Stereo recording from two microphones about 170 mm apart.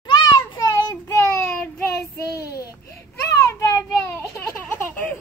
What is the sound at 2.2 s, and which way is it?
Child singing, 20° left (ahead or behind).